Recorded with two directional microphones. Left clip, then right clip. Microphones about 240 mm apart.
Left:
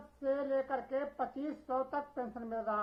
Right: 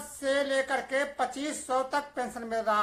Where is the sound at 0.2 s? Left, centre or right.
Centre.